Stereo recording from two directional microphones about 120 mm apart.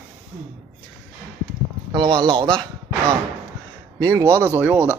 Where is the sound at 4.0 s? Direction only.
25° right (ahead or behind).